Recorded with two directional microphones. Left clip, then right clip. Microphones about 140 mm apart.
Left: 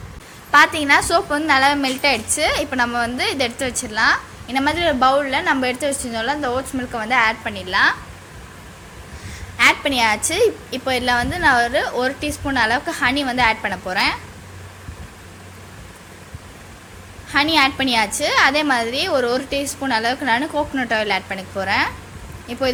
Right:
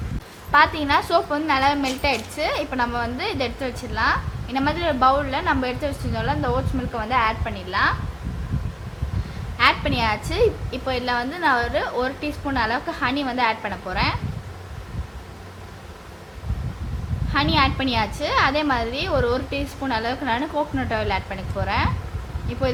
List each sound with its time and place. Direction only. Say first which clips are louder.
0.5 s a woman's voice: left 4 dB; 30° left (ahead or behind)
9.6 s a woman's voice: left 4 dB; 30° left (ahead or behind)
17.3 s a woman's voice: left 4 dB; 30° left (ahead or behind)